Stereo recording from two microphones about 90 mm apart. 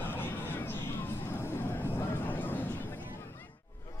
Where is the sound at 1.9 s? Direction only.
20° left (ahead or behind).